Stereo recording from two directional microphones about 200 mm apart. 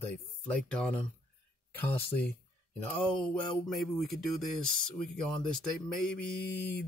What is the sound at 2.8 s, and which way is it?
Speech, 5° left (ahead or behind).